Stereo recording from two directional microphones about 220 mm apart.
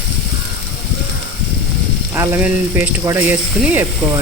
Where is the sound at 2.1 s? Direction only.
10° right (ahead or behind).